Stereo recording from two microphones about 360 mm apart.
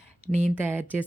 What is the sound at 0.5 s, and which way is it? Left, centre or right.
Speech, centre.